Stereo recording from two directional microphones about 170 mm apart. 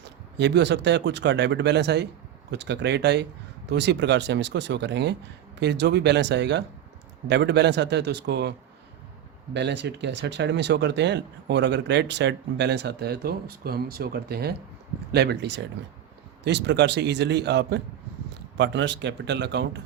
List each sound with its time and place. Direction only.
0.0 s a man's voice: 90° right
9.5 s a man's voice: 90° right